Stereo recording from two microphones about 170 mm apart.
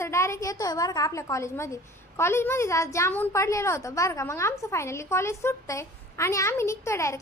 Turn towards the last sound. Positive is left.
turn(degrees=15)  # may be behind; listen again after turning